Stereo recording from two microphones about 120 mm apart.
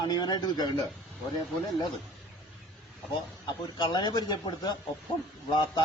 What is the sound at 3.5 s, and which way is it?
A man's voice, 40° left (ahead or behind).